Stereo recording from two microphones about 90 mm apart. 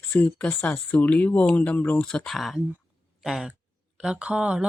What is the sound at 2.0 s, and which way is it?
Speech, 5° left (ahead or behind).